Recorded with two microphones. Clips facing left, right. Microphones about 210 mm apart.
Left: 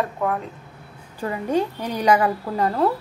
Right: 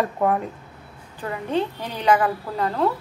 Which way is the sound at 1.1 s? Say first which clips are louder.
Left 2 dB; 10° left (ahead or behind).